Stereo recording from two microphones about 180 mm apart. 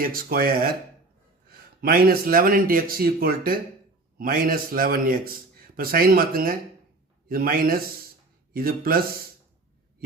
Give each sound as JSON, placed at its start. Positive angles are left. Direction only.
{"t": 0.0, "sound": "a man's voice", "side_deg": -55}